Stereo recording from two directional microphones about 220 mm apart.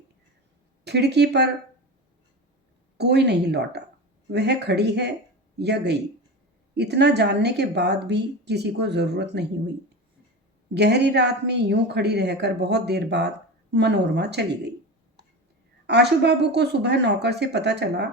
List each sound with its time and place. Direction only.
0.9 s a woman's voice: 50° right (ahead or behind)
3.0 s a woman's voice: 50° right (ahead or behind)
10.8 s a woman's voice: 50° right (ahead or behind)
15.9 s a woman's voice: 50° right (ahead or behind)